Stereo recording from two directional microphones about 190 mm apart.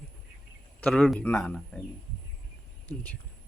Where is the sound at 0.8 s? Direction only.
5° left (ahead or behind).